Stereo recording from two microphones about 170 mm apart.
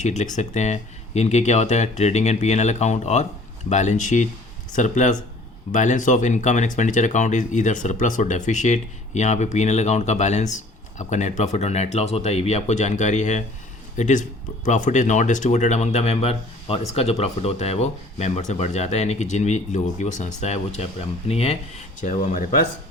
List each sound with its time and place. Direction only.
0.0 s speech: 45° left (ahead or behind)